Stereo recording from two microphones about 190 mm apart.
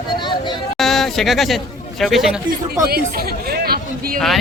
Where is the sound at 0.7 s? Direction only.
Centre (ahead or behind).